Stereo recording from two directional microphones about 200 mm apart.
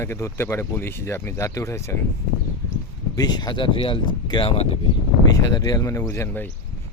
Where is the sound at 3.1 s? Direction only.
20° left (ahead or behind).